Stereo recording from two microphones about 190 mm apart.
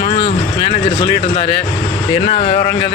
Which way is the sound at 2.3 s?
35° left (ahead or behind).